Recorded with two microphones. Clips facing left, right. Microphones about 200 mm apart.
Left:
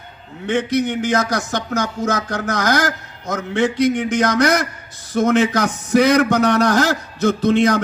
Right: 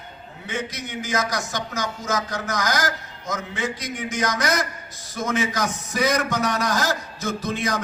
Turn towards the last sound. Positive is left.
turn(degrees=65)  # may be behind; listen again after turning